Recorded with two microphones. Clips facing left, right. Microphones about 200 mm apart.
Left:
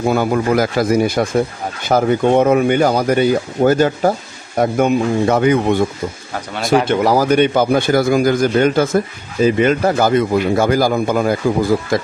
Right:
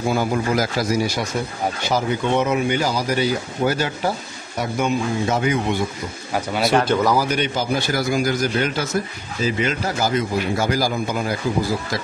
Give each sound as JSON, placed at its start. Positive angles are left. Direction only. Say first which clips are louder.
{"t": 0.1, "sound": "a man's voice", "louder": "left 5 dB", "side_deg": 60}
{"t": 6.8, "sound": "speech", "louder": "left 4 dB", "side_deg": 25}
{"t": 7.2, "sound": "a man's voice", "louder": "left 8 dB", "side_deg": 50}